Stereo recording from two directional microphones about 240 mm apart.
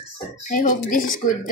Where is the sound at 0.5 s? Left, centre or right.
Left.